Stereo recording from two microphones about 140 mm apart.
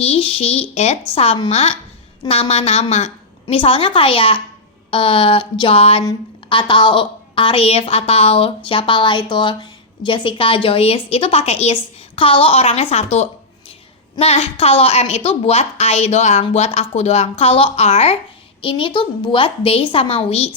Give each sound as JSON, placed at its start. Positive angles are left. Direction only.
{"t": 0.0, "sound": "a woman's voice", "side_deg": 45}